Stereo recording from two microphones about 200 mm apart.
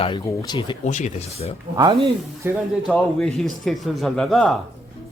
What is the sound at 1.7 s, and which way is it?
Speech, 25° right (ahead or behind).